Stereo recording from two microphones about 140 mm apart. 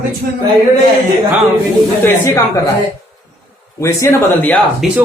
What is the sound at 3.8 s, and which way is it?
Speech, 20° left (ahead or behind).